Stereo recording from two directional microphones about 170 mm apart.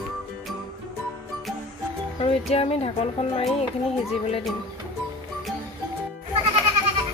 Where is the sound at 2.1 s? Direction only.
35° left (ahead or behind).